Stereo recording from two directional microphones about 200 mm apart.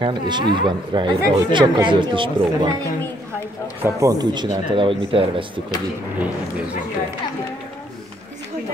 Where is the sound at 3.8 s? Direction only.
15° right (ahead or behind).